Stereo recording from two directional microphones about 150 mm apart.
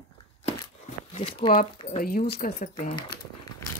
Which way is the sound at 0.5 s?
40° left (ahead or behind).